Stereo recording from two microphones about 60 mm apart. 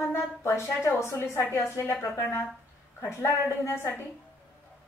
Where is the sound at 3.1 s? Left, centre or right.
Left.